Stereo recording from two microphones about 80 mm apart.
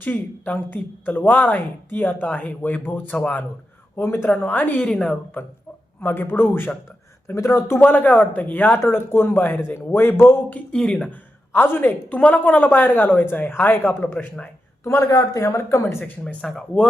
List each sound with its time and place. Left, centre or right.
0.0 s speech: centre
3.9 s speech: left
7.8 s speech: left
10.7 s speech: centre
11.1 s speech: left
14.8 s speech: left
16.2 s speech: centre